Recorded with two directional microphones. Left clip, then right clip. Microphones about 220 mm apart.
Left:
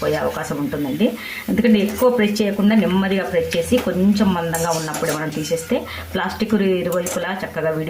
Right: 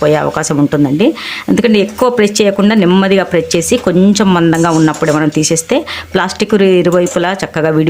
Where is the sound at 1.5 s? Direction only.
45° right (ahead or behind).